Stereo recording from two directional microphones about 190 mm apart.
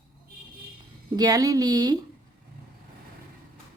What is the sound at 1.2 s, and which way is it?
Speech, 20° right (ahead or behind).